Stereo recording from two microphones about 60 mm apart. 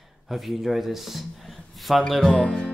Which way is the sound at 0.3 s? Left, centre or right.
Centre.